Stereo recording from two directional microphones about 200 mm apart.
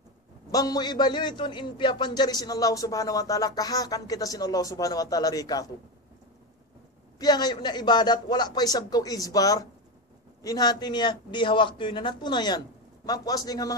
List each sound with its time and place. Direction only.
0.5 s a man's voice: 20° left (ahead or behind)
7.2 s a man's voice: 20° left (ahead or behind)